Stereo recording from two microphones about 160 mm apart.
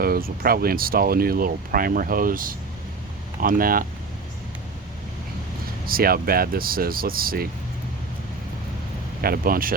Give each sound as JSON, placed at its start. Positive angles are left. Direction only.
{"t": 0.0, "sound": "speech", "side_deg": -70}
{"t": 5.8, "sound": "speech", "side_deg": -65}
{"t": 9.2, "sound": "speech", "side_deg": -65}